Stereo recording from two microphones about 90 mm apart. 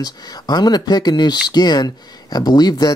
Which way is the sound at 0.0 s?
50° left (ahead or behind).